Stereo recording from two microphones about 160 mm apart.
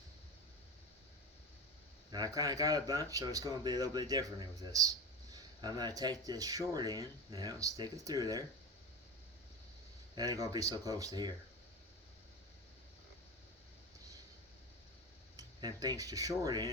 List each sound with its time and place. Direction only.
2.0 s speech: 25° right (ahead or behind)
10.2 s speech: 25° right (ahead or behind)
15.4 s speech: 25° right (ahead or behind)